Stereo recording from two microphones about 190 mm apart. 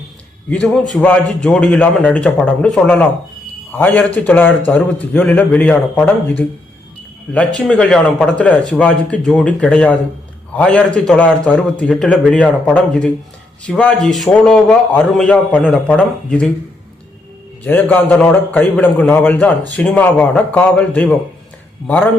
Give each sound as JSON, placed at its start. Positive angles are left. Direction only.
{"t": 0.5, "sound": "a man's voice", "side_deg": 0}
{"t": 17.7, "sound": "a man's voice", "side_deg": 10}